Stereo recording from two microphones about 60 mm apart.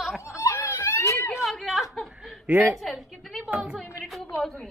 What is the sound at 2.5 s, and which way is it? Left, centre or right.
Speech, right.